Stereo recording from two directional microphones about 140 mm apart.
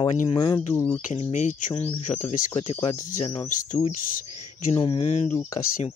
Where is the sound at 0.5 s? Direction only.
15° left (ahead or behind).